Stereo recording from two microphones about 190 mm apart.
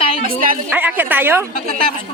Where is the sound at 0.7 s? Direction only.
10° right (ahead or behind).